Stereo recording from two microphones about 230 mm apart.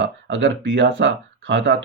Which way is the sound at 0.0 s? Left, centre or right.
Right.